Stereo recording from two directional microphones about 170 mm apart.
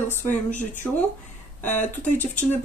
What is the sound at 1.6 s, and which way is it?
Speech, 45° left (ahead or behind).